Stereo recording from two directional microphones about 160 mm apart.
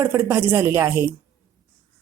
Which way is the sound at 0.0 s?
15° right (ahead or behind).